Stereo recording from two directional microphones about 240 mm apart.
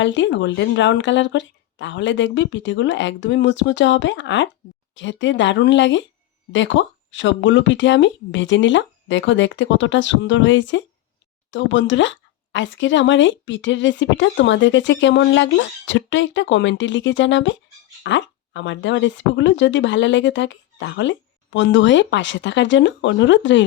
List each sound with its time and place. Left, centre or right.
0.0 s speech: left